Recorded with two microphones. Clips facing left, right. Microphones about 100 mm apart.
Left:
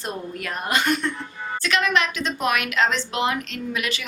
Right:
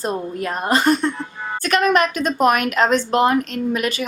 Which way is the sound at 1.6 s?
45° right (ahead or behind).